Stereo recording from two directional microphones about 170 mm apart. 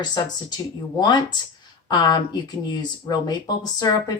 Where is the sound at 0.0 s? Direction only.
25° left (ahead or behind).